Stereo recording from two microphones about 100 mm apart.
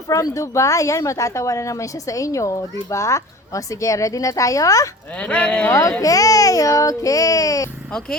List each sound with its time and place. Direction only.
0.1 s speech: 35° left (ahead or behind)
5.1 s speech: 10° left (ahead or behind)
6.0 s speech: 35° left (ahead or behind)